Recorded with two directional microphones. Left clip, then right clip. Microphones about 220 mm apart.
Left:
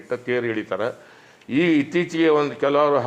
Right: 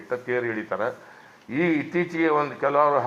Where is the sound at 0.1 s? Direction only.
45° left (ahead or behind).